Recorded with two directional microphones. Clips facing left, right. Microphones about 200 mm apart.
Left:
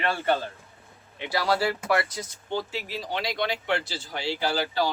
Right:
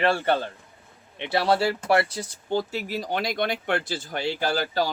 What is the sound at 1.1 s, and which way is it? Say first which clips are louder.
A man's voice: right 3 dB; 25° right (ahead or behind).